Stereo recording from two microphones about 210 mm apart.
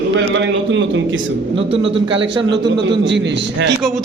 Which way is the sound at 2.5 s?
55° right (ahead or behind).